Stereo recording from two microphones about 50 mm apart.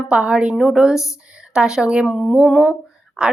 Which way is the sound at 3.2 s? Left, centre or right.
Centre.